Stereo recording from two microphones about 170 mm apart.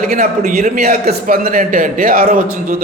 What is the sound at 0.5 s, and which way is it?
A man's voice, 45° right (ahead or behind).